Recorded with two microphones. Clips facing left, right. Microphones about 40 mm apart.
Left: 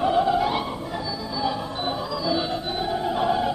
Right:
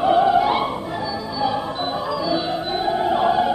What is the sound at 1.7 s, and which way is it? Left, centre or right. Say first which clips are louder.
Music: right 4 dB; centre.